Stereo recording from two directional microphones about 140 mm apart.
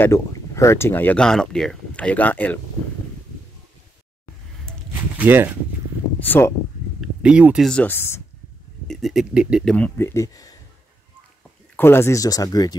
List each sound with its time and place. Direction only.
0.0 s speech: 20° left (ahead or behind)
5.1 s speech: 15° right (ahead or behind)
6.1 s speech: 15° left (ahead or behind)
7.0 s a sound: 5° right (ahead or behind)
7.7 s speech: 15° left (ahead or behind)
8.8 s speech: centre (ahead or behind)
9.8 s speech: 15° left (ahead or behind)
11.7 s speech: 15° left (ahead or behind)